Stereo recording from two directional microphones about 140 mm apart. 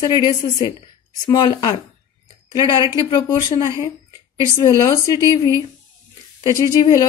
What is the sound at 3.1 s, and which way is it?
A woman's voice, 30° left (ahead or behind).